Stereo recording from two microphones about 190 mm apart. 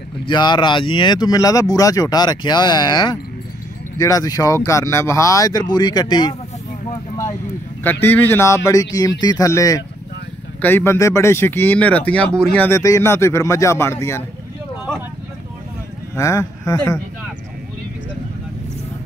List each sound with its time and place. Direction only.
0.3 s speech: 25° left (ahead or behind)
7.8 s speech: 10° left (ahead or behind)
16.2 s speech: 15° left (ahead or behind)